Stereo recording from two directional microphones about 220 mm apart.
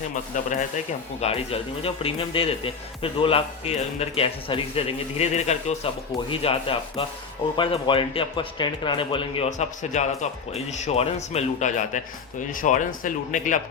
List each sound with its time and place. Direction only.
1.2 s speech: 25° left (ahead or behind)